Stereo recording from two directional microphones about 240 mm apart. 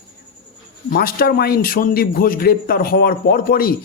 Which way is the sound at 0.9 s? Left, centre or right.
Left.